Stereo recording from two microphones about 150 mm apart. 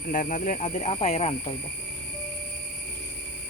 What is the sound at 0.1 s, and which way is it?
Speech, 65° left (ahead or behind).